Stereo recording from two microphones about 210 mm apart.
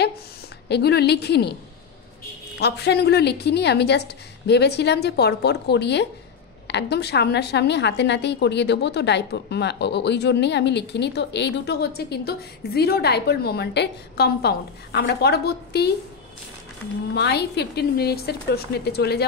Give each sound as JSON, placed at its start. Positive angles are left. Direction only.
{"t": 0.7, "sound": "a woman's voice", "side_deg": 50}
{"t": 2.6, "sound": "a woman's voice", "side_deg": 50}
{"t": 17.1, "sound": "a woman's voice", "side_deg": 50}